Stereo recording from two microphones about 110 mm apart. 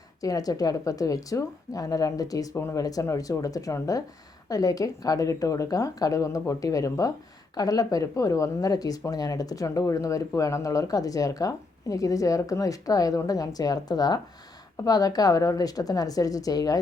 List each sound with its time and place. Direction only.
0.2 s speech: 35° left (ahead or behind)